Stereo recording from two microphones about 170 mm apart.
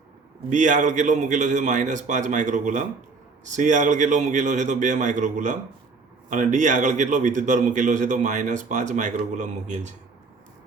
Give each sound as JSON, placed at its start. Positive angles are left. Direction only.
{"t": 0.5, "sound": "a man's voice", "side_deg": -50}